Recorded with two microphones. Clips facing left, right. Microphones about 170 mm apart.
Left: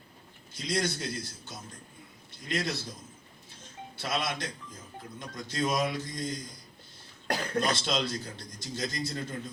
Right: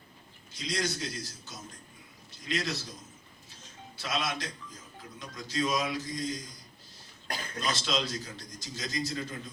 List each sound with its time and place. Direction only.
0.5 s a man's voice: 55° left (ahead or behind)
3.9 s a man's voice: 55° left (ahead or behind)
7.3 s a man's voice: 70° left (ahead or behind)